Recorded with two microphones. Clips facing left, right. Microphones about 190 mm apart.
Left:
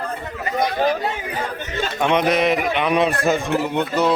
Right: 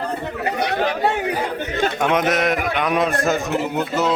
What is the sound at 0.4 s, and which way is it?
Chatter, 70° right (ahead or behind).